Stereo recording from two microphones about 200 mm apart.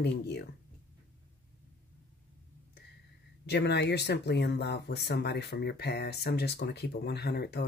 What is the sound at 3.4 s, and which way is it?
Speech, 60° left (ahead or behind).